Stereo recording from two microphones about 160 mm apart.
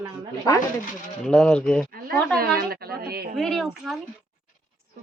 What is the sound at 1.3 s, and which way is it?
Speech, 5° left (ahead or behind).